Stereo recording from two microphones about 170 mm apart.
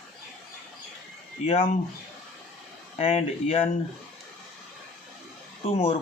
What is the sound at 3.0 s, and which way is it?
Speech, 35° left (ahead or behind).